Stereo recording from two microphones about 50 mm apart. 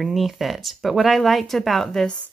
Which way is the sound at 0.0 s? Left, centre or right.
Centre.